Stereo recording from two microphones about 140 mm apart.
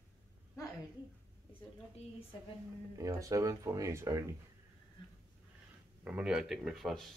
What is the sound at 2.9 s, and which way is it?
Speech, 25° right (ahead or behind).